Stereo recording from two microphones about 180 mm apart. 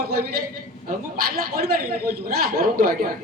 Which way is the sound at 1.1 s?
55° right (ahead or behind).